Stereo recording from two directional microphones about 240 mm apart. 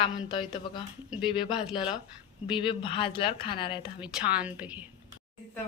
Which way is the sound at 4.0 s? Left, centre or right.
Centre.